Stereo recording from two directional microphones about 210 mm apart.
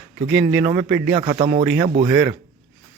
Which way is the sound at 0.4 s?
10° right (ahead or behind).